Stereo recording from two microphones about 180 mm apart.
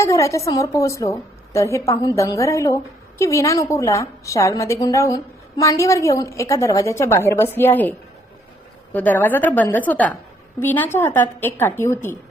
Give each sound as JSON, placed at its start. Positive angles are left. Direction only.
{"t": 0.0, "sound": "a woman's voice", "side_deg": 15}